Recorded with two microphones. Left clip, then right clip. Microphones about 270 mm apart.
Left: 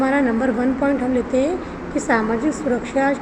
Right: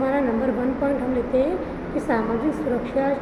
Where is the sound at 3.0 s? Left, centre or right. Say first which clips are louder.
Left 4 dB; left.